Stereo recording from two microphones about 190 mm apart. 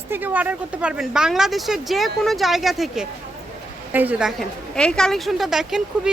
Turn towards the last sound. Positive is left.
turn(degrees=-5)  # may be behind; listen again after turning